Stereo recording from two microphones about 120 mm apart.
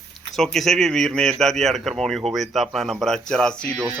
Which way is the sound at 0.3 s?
5° left (ahead or behind).